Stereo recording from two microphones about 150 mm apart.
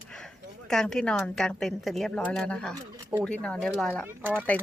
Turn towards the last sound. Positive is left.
turn(degrees=-15)  # may be behind; listen again after turning